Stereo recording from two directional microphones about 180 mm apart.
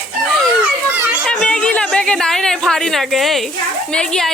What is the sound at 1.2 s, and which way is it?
A woman's voice, 5° left (ahead or behind).